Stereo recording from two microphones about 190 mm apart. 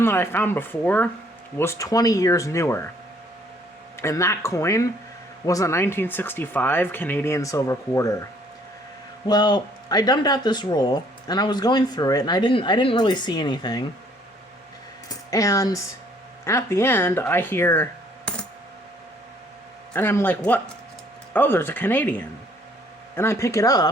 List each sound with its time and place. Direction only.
0.0 s speech: 10° left (ahead or behind)
3.9 s speech: 15° left (ahead or behind)
9.2 s speech: 20° left (ahead or behind)
15.3 s speech: 15° left (ahead or behind)
18.3 s coin: 5° left (ahead or behind)
19.9 s speech: 10° left (ahead or behind)